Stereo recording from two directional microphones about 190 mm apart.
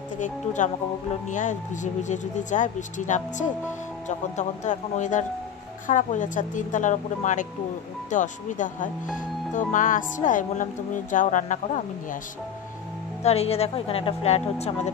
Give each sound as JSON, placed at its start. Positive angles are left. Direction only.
{"t": 0.2, "sound": "speech", "side_deg": 40}
{"t": 13.2, "sound": "speech", "side_deg": 35}